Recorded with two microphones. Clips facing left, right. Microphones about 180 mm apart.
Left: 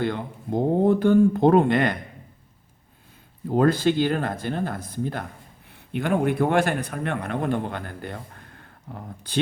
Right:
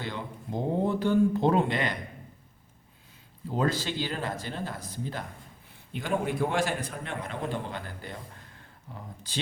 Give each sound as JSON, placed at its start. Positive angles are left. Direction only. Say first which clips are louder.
{"t": 0.0, "sound": "a man's voice", "louder": "left 9 dB", "side_deg": 55}
{"t": 3.5, "sound": "a man's voice", "louder": "left 9 dB", "side_deg": 55}